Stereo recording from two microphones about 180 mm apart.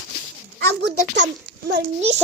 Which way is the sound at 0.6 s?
70° right (ahead or behind).